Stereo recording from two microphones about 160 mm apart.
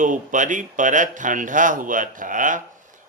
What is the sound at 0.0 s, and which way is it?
A man's voice, 55° right (ahead or behind).